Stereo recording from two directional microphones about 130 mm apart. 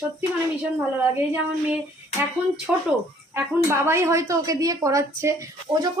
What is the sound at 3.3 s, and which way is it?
A woman's voice, 20° right (ahead or behind).